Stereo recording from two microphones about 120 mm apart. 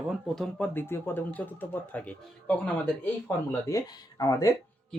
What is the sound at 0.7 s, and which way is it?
Speech, 20° left (ahead or behind).